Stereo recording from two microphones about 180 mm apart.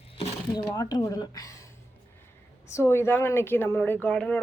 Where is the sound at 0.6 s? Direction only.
20° left (ahead or behind).